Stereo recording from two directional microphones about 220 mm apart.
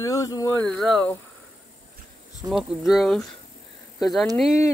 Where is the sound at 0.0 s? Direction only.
15° left (ahead or behind).